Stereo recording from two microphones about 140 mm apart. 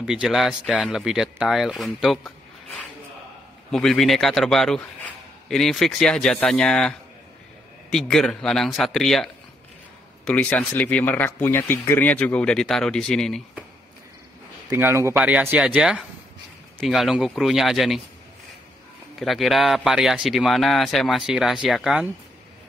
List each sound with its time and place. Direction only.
0.0 s a man's voice: 5° right (ahead or behind)
14.7 s a man's voice: 20° right (ahead or behind); by 18.0 s centre (ahead or behind)
19.1 s a man's voice: centre (ahead or behind)